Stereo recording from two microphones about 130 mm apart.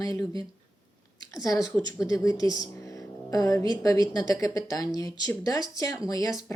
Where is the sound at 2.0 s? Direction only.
25° left (ahead or behind).